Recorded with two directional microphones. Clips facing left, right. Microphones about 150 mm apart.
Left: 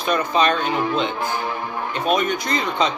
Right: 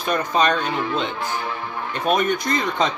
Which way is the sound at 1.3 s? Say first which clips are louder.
Left 2 dB; 30° left (ahead or behind).